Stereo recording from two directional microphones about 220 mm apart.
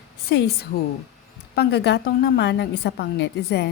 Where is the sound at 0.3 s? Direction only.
45° left (ahead or behind).